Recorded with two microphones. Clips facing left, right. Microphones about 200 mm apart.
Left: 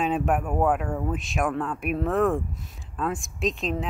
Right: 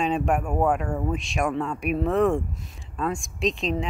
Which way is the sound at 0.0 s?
5° left (ahead or behind).